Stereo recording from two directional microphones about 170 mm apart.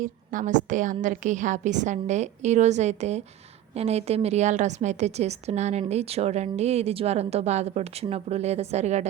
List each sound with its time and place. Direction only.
0.0 s a woman's voice: 50° right (ahead or behind)